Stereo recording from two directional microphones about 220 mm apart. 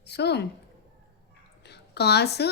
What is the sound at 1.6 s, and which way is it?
Speech, 50° left (ahead or behind).